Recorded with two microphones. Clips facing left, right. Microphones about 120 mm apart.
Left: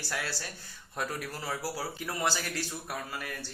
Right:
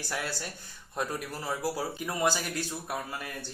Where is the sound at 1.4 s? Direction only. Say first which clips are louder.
Right 4 dB; 20° right (ahead or behind).